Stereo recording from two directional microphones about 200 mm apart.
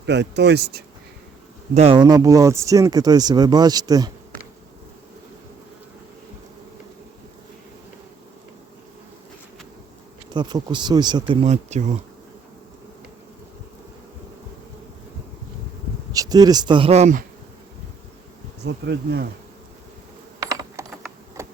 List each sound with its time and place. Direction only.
0.0 s speech: 60° right (ahead or behind)
1.7 s speech: 30° right (ahead or behind)
10.3 s speech: 20° right (ahead or behind)
11.4 s speech: 35° right (ahead or behind)
16.1 s speech: 20° right (ahead or behind); by 17.2 s 35° right (ahead or behind)
18.6 s speech: 55° right (ahead or behind)
20.4 s typing: 20° right (ahead or behind)
21.4 s a sound: 15° right (ahead or behind)